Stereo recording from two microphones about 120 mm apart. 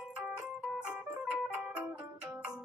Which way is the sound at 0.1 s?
10° right (ahead or behind).